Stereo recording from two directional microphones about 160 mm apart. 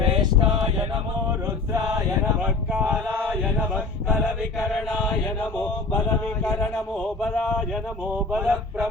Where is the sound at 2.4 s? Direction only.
5° right (ahead or behind).